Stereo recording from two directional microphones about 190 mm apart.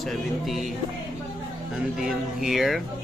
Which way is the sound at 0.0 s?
Centre (ahead or behind).